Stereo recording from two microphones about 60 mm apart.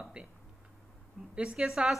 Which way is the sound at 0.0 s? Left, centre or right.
Centre.